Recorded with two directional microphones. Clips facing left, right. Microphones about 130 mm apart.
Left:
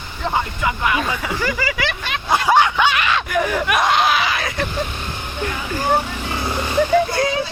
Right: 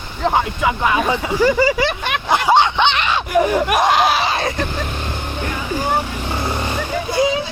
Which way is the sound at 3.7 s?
45° right (ahead or behind).